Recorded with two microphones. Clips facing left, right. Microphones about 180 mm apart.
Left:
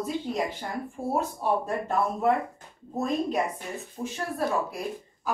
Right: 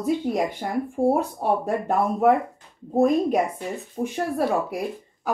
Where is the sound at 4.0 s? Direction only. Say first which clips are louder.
Right 7 dB; 50° right (ahead or behind).